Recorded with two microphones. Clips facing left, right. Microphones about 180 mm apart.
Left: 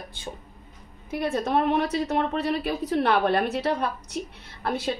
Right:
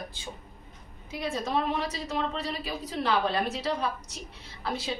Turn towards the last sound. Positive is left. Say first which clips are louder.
# left 5 dB
turn(degrees=60)  # may be behind; listen again after turning